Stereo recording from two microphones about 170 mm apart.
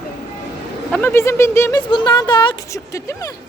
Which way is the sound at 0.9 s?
10° left (ahead or behind).